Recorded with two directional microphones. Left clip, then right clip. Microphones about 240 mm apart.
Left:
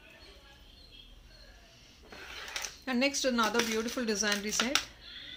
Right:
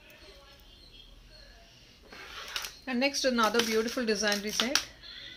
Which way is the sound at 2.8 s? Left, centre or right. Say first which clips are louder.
Right 1 dB; centre.